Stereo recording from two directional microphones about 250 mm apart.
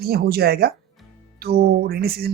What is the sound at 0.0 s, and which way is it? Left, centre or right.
Speech, right.